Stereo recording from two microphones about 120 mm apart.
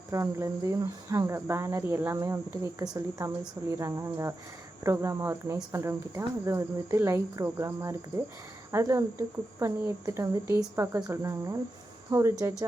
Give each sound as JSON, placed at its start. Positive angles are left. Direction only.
{"t": 0.1, "sound": "speech", "side_deg": -25}